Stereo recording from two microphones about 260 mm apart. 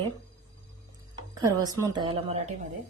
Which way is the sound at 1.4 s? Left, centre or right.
Centre.